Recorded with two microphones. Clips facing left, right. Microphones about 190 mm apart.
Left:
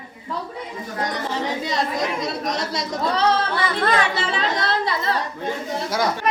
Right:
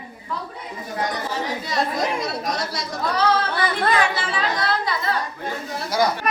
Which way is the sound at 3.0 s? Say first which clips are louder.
Even; 25° left (ahead or behind).